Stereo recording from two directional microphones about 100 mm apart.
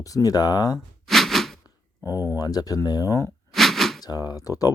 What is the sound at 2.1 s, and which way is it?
Speech, 35° left (ahead or behind).